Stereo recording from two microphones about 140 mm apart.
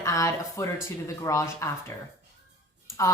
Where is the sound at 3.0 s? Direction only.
20° left (ahead or behind).